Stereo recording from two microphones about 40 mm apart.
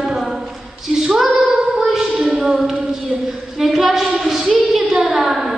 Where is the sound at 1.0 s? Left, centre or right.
Centre.